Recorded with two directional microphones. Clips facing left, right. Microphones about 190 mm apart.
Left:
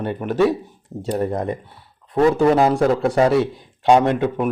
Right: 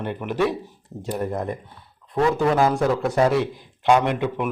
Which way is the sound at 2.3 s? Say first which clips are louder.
Left 3 dB; 20° left (ahead or behind).